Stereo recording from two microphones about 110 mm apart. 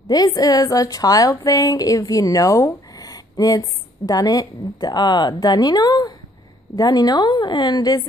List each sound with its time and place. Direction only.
0.1 s speech: 35° left (ahead or behind)